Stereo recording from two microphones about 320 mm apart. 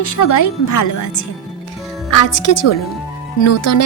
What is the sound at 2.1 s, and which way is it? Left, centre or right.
Speech, left.